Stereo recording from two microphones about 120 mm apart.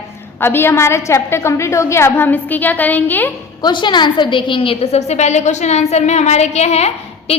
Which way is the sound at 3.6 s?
40° left (ahead or behind).